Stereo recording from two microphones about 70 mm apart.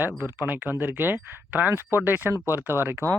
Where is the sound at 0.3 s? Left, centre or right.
Right.